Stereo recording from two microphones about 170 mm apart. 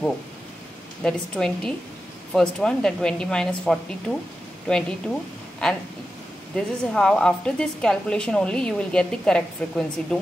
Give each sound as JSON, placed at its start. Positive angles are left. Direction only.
{"t": 1.0, "sound": "a woman's voice", "side_deg": 5}